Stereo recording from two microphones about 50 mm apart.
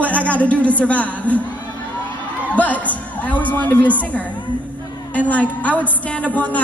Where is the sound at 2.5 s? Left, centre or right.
Left.